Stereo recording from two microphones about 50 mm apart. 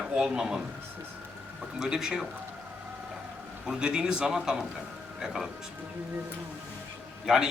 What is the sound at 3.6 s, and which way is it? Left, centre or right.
A man's voice, centre.